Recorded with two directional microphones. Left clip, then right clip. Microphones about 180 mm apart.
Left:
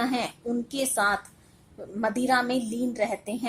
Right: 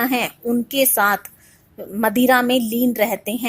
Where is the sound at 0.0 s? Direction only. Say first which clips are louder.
Right 7 dB; 35° right (ahead or behind).